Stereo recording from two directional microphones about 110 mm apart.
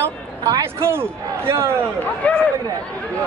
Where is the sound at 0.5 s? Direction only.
25° right (ahead or behind).